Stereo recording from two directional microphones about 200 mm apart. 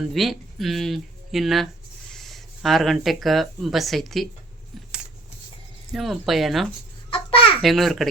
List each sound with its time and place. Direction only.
0.1 s speech: centre (ahead or behind)
5.9 s speech: centre (ahead or behind)
7.1 s a sound: 25° left (ahead or behind)
7.6 s speech: centre (ahead or behind)